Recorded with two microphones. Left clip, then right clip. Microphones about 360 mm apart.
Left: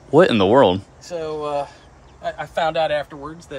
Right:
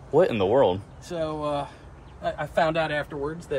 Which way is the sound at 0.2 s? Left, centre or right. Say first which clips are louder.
Left 7 dB; left.